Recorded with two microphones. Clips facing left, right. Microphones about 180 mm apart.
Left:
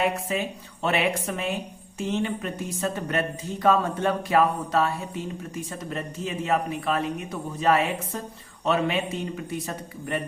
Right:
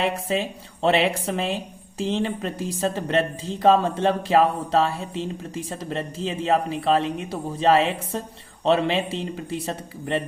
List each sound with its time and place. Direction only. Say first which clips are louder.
0.0 s speech: right 2 dB; 30° right (ahead or behind)